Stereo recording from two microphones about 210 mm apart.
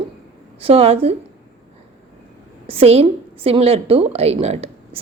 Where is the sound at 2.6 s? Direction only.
30° right (ahead or behind).